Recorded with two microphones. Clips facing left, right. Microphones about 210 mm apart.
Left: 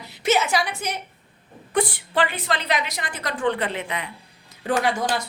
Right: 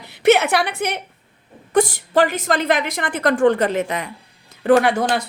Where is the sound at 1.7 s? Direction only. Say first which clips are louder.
Right 6 dB; 45° right (ahead or behind).